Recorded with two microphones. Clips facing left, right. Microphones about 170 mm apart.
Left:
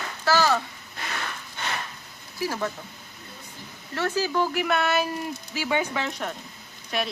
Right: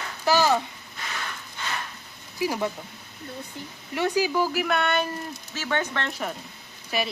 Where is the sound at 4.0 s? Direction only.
15° right (ahead or behind).